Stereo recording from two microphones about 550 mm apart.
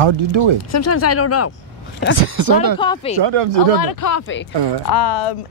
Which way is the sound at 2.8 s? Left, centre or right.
Centre.